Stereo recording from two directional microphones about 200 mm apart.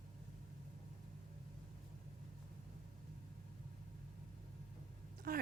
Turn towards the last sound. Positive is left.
turn(degrees=-45)  # may be behind; listen again after turning